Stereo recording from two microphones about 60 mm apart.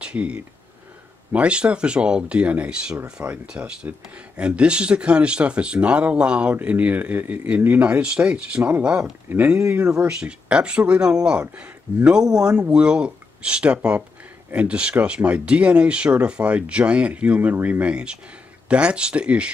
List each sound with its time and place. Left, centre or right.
0.0 s speech: centre